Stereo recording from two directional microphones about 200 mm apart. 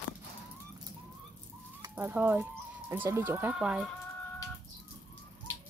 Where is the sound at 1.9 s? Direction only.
10° right (ahead or behind).